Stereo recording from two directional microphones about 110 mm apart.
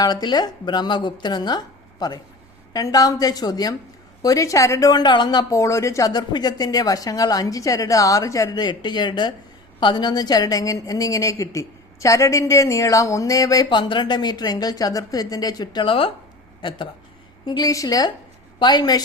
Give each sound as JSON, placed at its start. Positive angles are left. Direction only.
{"t": 0.0, "sound": "a woman's voice", "side_deg": 40}
{"t": 5.5, "sound": "a woman's voice", "side_deg": 25}
{"t": 13.7, "sound": "a woman's voice", "side_deg": 45}